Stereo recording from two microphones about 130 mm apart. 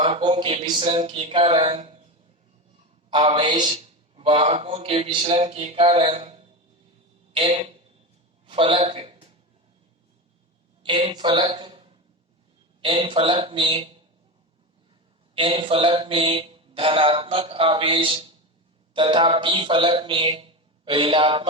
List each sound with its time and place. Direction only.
0.0 s a man's voice: 40° right (ahead or behind)
0.9 s speech: 50° right (ahead or behind)
3.1 s a man's voice: 35° right (ahead or behind)
5.4 s a man's voice: 55° right (ahead or behind)
10.8 s a woman's voice: 40° right (ahead or behind)
15.4 s a man's voice: 45° right (ahead or behind)